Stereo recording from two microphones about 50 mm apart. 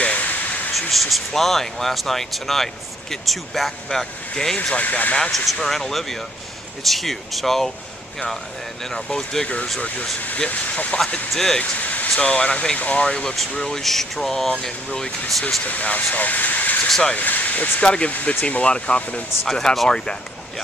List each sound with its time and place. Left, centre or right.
0.0 s a sound: left
0.7 s speech: centre
4.7 s speech: left
5.3 s speech: centre
8.8 s speech: centre
10.5 s speech: left
11.3 s speech: centre
11.8 s a sound: left
12.2 s speech: left
15.6 s speech: left
17.8 s speech: centre
19.4 s speech: centre